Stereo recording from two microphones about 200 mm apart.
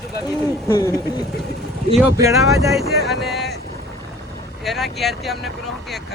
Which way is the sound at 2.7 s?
Centre (ahead or behind).